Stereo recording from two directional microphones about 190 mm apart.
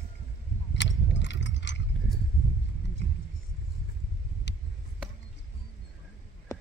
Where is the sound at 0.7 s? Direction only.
70° left (ahead or behind).